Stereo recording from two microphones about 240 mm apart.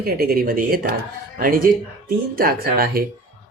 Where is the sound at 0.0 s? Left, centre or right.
Right.